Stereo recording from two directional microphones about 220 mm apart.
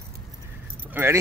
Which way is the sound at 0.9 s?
10° right (ahead or behind).